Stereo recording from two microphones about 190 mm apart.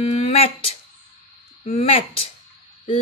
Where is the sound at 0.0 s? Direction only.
35° left (ahead or behind).